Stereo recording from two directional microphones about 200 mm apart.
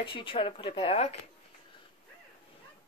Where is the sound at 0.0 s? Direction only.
25° left (ahead or behind).